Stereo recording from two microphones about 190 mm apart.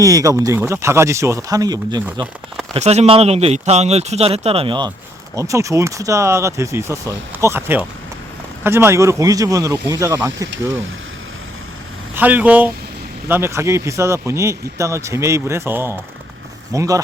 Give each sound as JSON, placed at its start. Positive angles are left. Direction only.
{"t": 0.0, "sound": "speech", "side_deg": -20}
{"t": 2.7, "sound": "speech", "side_deg": -35}
{"t": 5.4, "sound": "speech", "side_deg": -15}
{"t": 10.5, "sound": "speech", "side_deg": -85}
{"t": 12.1, "sound": "speech", "side_deg": -10}